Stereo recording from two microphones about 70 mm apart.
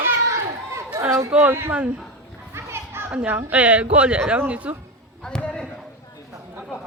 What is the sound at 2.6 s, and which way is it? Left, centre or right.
Children playing, right.